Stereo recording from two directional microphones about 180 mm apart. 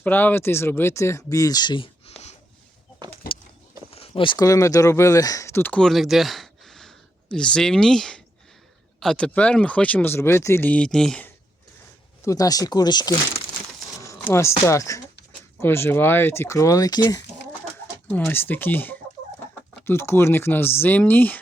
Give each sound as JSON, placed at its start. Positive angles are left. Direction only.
{"t": 0.0, "sound": "speech", "side_deg": 10}
{"t": 3.9, "sound": "speech", "side_deg": 30}
{"t": 12.2, "sound": "speech", "side_deg": 20}
{"t": 18.1, "sound": "speech", "side_deg": 10}